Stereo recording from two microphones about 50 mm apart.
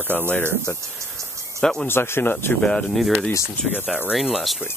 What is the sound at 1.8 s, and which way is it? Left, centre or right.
Speech, left.